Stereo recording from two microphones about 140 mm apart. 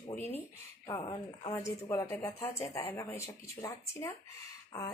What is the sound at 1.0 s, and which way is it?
Speech, 35° left (ahead or behind).